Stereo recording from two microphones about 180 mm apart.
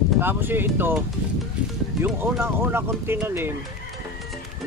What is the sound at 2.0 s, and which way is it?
Speech, 10° right (ahead or behind).